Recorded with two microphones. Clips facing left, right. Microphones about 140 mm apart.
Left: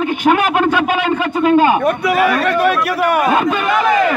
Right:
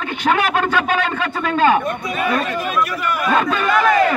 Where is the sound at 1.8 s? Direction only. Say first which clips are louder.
Left 8 dB; 75° left (ahead or behind).